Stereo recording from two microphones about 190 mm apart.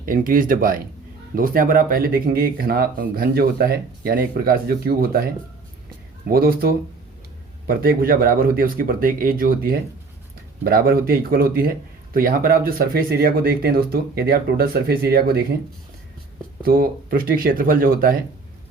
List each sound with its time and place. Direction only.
0.0 s speech: 45° right (ahead or behind)
6.2 s speech: 50° right (ahead or behind)
16.6 s speech: 50° right (ahead or behind)